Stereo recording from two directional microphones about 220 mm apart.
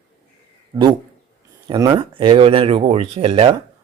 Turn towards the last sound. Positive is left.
turn(degrees=-25)  # may be behind; listen again after turning